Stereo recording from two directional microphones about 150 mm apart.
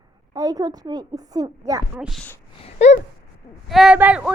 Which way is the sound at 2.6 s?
50° left (ahead or behind).